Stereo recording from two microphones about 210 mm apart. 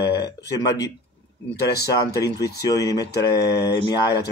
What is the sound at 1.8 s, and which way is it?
Speech, 15° left (ahead or behind).